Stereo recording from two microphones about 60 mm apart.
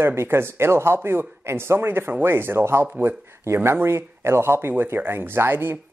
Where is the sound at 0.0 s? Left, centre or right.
Right.